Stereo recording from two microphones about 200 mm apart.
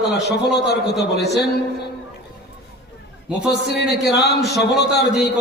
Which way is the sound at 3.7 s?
55° left (ahead or behind).